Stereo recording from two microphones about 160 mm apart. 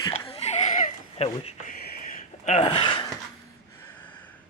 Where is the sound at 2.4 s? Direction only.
40° left (ahead or behind).